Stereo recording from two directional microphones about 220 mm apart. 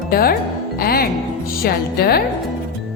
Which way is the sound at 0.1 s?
45° left (ahead or behind).